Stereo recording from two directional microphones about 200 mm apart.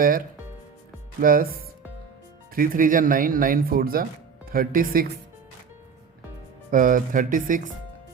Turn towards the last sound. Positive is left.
turn(degrees=-40)  # may be behind; listen again after turning